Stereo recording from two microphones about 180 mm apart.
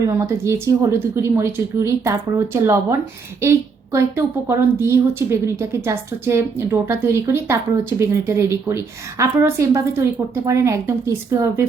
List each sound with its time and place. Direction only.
0.1 s a woman's voice: 15° right (ahead or behind)